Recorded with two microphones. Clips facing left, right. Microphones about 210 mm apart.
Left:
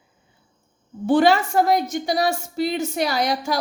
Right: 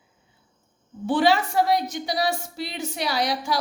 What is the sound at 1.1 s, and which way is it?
A woman's voice, 45° left (ahead or behind).